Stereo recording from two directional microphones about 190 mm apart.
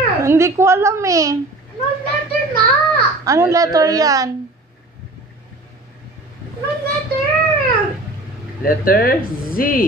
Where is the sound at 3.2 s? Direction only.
15° right (ahead or behind).